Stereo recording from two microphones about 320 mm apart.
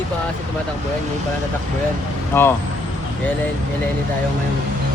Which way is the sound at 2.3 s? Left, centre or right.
Centre.